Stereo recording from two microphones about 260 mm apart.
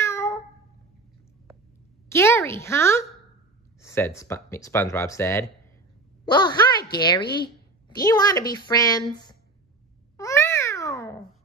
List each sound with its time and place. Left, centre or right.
0.0 s cat: centre
2.0 s speech: centre
10.1 s babbling: centre